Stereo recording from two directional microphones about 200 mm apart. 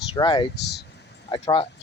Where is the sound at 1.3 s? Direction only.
25° left (ahead or behind).